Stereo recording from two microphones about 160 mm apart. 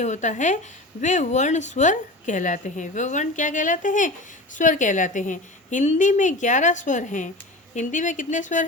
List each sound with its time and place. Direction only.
0.0 s a woman's voice: 50° left (ahead or behind)